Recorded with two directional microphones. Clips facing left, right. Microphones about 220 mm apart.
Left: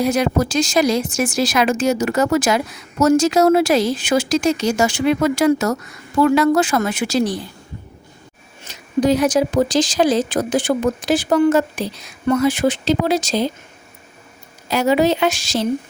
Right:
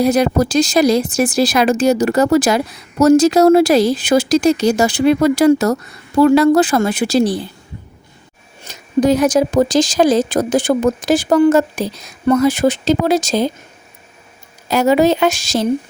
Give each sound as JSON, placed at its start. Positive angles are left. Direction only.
{"t": 0.0, "sound": "speech", "side_deg": -35}
{"t": 8.6, "sound": "speech", "side_deg": -45}
{"t": 14.7, "sound": "speech", "side_deg": -45}